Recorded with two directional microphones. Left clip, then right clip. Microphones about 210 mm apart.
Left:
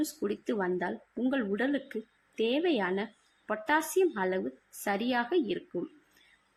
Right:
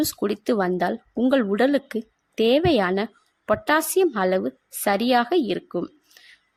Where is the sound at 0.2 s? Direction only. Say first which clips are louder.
Right 9 dB; 50° right (ahead or behind).